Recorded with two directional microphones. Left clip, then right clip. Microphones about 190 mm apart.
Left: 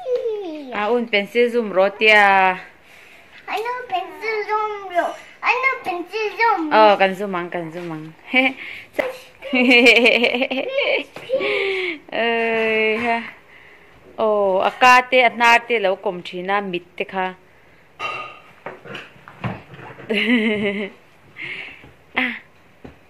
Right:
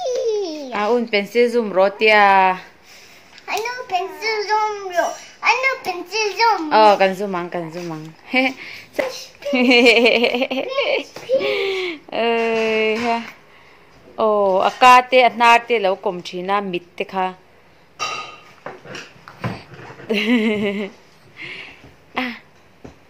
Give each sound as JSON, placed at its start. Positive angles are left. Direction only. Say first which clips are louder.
{"t": 0.3, "sound": "babbling", "louder": "right 5 dB", "side_deg": -50}
{"t": 0.7, "sound": "a woman's voice", "louder": "even", "side_deg": -10}
{"t": 3.4, "sound": "a sound", "louder": "even", "side_deg": -20}
{"t": 6.0, "sound": "child singing", "louder": "right 2 dB", "side_deg": -25}
{"t": 6.7, "sound": "a woman's voice", "louder": "even", "side_deg": -5}
{"t": 9.5, "sound": "a sound", "louder": "even", "side_deg": -5}
{"t": 14.1, "sound": "a woman's voice", "louder": "right 1 dB", "side_deg": -10}
{"t": 20.1, "sound": "a woman's voice", "louder": "even", "side_deg": -10}
{"t": 21.4, "sound": "a sound", "louder": "left 2 dB", "side_deg": -5}